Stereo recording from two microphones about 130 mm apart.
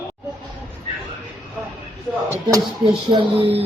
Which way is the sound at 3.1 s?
35° right (ahead or behind).